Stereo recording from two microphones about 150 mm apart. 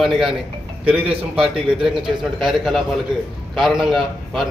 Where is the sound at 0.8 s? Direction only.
40° right (ahead or behind).